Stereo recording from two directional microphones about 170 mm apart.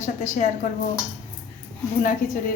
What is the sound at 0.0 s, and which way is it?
Speech, 45° left (ahead or behind).